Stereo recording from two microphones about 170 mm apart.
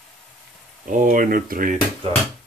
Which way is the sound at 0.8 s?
50° right (ahead or behind).